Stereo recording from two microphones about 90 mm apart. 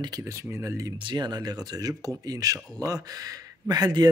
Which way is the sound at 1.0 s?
55° right (ahead or behind).